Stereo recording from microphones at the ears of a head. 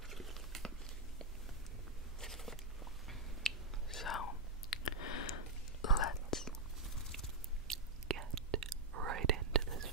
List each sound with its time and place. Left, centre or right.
2.1 s a sound: centre
4.0 s whispering: left
7.6 s whispering: right